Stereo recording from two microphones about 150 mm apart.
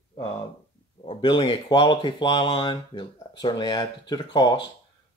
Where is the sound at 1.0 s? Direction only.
35° left (ahead or behind).